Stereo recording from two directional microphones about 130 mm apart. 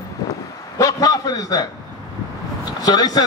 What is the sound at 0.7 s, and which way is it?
Speech, 25° left (ahead or behind).